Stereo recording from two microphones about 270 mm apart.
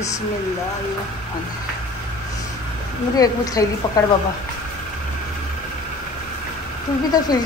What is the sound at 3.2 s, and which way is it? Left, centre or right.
Speech, centre.